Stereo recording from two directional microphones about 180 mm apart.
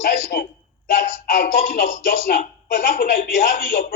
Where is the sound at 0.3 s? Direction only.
60° left (ahead or behind).